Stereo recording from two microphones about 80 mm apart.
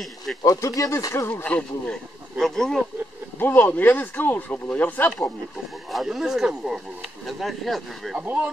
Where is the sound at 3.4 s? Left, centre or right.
Left.